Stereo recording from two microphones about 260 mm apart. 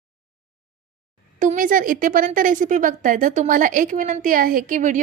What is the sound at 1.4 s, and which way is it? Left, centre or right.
A woman's voice, right.